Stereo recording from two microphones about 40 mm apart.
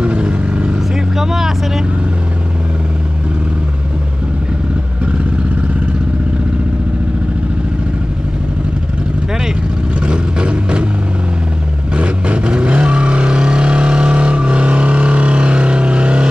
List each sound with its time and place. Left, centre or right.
0.0 s vehicle: right
1.1 s vehicle: centre
10.0 s vehicle: right
12.0 s vehicle: right